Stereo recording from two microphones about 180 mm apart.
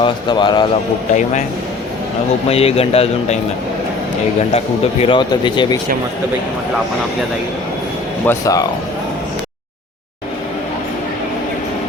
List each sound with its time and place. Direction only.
0.0 s speech: 25° left (ahead or behind)
1.1 s speech: 45° left (ahead or behind)
2.5 s speech: 35° left (ahead or behind)
4.5 s speech: 30° left (ahead or behind)
8.3 s speech: 20° left (ahead or behind)